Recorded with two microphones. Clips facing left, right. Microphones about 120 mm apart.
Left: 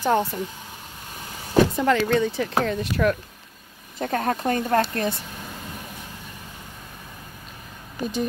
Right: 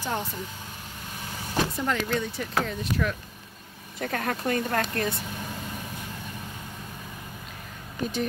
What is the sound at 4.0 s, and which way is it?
Speech, 30° left (ahead or behind).